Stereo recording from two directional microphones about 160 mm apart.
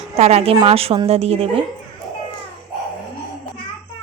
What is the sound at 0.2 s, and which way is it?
A woman's voice, 40° right (ahead or behind).